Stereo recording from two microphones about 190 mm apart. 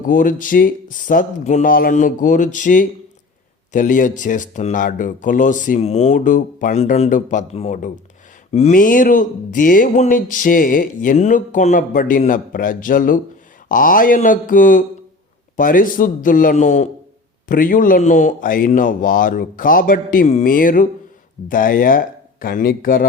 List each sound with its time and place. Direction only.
0.1 s speech: 45° left (ahead or behind)